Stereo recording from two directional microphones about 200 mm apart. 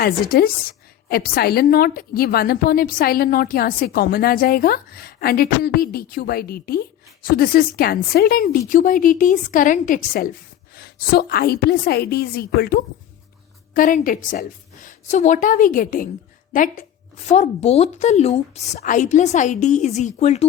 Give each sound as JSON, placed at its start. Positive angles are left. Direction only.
{"t": 0.0, "sound": "a woman's voice", "side_deg": 50}
{"t": 17.3, "sound": "a woman's voice", "side_deg": 30}